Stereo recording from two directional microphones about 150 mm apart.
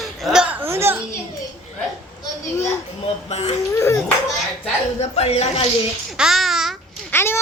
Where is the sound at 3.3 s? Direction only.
45° left (ahead or behind).